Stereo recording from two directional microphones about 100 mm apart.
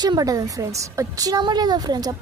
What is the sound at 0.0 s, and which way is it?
A woman's voice, 40° right (ahead or behind).